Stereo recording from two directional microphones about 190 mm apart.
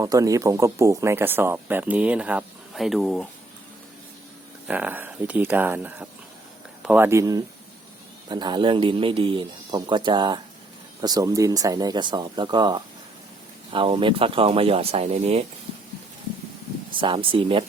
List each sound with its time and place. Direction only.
0.0 s speech: 15° right (ahead or behind); by 3.2 s centre (ahead or behind)
4.7 s speech: 10° right (ahead or behind); by 15.4 s 35° right (ahead or behind)
16.9 s speech: 25° right (ahead or behind)